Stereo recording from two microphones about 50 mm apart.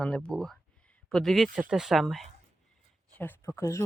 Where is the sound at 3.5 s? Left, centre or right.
Left.